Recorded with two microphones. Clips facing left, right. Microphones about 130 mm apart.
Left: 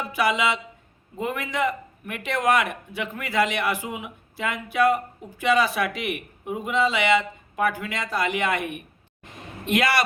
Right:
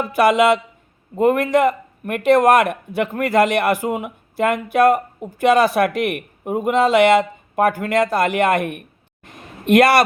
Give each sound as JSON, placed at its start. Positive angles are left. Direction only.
{"t": 0.0, "sound": "a man's voice", "side_deg": -60}